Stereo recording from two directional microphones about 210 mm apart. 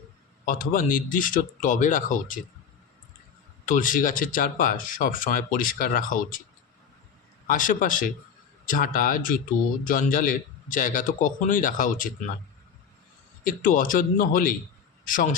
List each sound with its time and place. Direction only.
0.4 s speech: 45° left (ahead or behind)
3.7 s speech: 40° left (ahead or behind)
7.4 s speech: 40° left (ahead or behind)
13.4 s speech: 40° left (ahead or behind)